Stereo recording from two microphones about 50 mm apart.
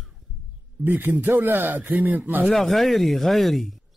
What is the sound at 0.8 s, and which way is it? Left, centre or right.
A man's voice, right.